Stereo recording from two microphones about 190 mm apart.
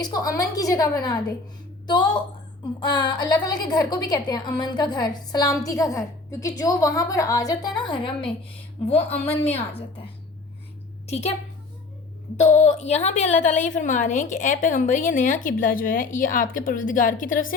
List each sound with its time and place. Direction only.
0.0 s a woman's voice: 20° left (ahead or behind)
2.8 s a woman's voice: 20° left (ahead or behind)
11.1 s a woman's voice: 35° left (ahead or behind)
12.4 s a woman's voice: 40° left (ahead or behind)